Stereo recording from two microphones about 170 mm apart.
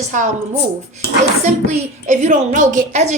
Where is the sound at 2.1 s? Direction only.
50° right (ahead or behind).